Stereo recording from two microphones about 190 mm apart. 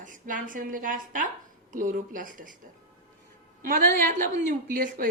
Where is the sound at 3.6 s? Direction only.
45° right (ahead or behind).